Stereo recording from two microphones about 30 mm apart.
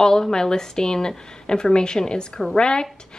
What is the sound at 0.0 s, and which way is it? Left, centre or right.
A woman's voice, left.